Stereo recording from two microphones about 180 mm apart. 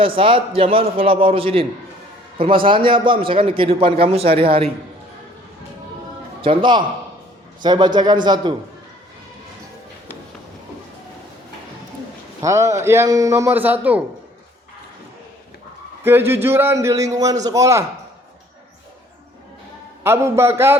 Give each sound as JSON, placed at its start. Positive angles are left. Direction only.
{"t": 0.0, "sound": "a man's voice", "side_deg": -30}
{"t": 6.4, "sound": "a man's voice", "side_deg": -30}
{"t": 12.4, "sound": "a man's voice", "side_deg": -15}
{"t": 16.0, "sound": "a man's voice", "side_deg": -15}
{"t": 20.1, "sound": "a man's voice", "side_deg": -15}